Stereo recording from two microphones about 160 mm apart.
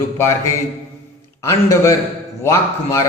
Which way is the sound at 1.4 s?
20° left (ahead or behind).